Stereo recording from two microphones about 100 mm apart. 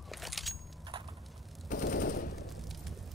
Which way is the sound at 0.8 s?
55° right (ahead or behind).